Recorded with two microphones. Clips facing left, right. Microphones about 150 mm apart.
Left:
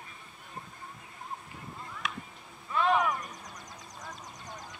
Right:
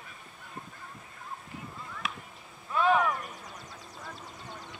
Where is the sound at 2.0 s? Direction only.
Centre (ahead or behind).